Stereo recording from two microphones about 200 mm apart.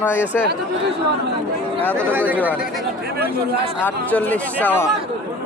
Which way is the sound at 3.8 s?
5° left (ahead or behind).